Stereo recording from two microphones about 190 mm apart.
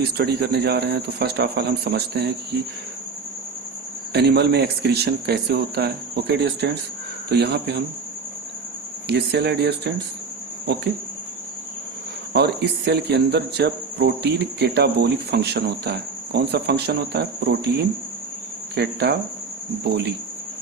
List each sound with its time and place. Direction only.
0.2 s speech: 60° right (ahead or behind)
4.1 s speech: 60° right (ahead or behind)
9.0 s speech: 60° right (ahead or behind)
12.3 s speech: 60° right (ahead or behind)